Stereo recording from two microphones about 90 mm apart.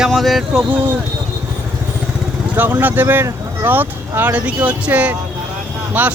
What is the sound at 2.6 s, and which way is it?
Speech, 20° right (ahead or behind).